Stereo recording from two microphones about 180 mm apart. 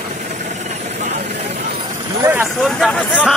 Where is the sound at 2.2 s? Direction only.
15° right (ahead or behind).